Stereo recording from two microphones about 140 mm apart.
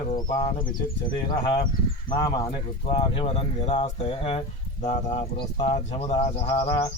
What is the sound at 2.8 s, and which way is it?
Speech, 45° left (ahead or behind).